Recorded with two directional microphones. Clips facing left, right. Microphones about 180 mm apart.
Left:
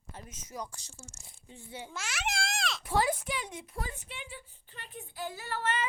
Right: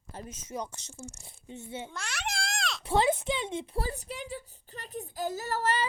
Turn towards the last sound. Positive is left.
turn(degrees=-40)  # may be behind; listen again after turning